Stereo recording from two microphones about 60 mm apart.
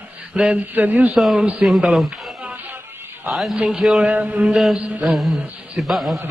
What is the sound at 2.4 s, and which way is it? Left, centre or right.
Music, right.